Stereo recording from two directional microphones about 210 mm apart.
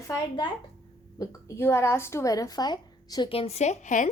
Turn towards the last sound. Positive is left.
turn(degrees=35)  # may be behind; listen again after turning